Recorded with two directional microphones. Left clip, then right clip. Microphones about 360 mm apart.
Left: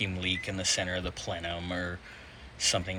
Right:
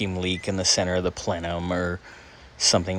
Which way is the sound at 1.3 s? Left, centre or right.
Right.